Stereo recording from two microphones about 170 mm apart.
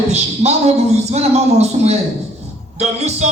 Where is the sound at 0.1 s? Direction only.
40° right (ahead or behind).